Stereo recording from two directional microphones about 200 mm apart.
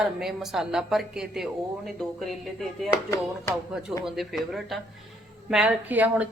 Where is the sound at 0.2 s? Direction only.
Centre (ahead or behind).